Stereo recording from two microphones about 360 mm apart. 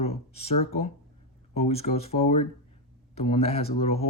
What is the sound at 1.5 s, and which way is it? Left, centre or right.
Speech, centre.